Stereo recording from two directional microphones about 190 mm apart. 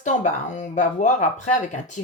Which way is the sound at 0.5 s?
40° left (ahead or behind).